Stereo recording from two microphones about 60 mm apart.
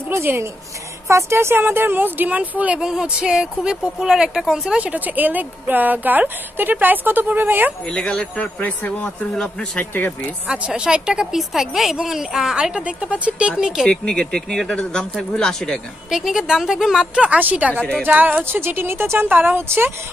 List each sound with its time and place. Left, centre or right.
0.1 s speech: right
1.6 s speech: right
2.8 s a woman's voice: centre
4.7 s a woman's voice: right
7.8 s speech: centre
9.3 s speech: centre
10.4 s a woman's voice: centre
13.8 s speech: centre
14.2 s speech: centre
16.1 s a woman's voice: centre; by 19.9 s right